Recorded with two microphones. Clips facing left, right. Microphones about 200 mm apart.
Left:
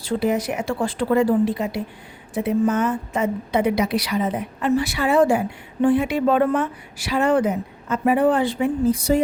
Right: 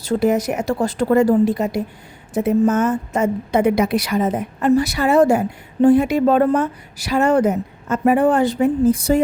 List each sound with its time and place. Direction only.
0.0 s a woman's voice: 45° right (ahead or behind)